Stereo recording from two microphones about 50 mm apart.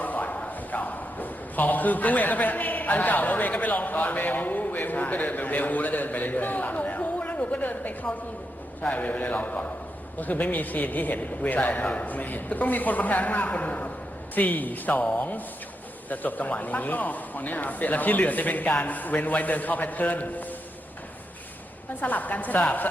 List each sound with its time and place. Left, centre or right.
0.0 s a man's voice: left
15.0 s a man's voice: left
22.0 s a man's voice: left